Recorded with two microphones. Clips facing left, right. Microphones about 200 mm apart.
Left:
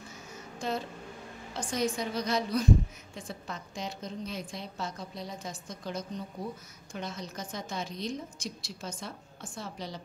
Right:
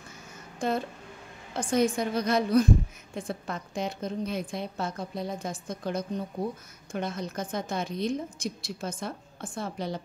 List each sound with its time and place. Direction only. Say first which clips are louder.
0.6 s a woman's voice: right 5 dB; 55° right (ahead or behind)